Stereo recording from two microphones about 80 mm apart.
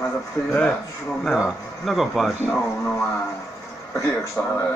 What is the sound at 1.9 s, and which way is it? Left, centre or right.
Speech, centre.